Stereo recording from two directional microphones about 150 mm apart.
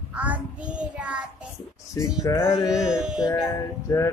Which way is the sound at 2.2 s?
15° left (ahead or behind).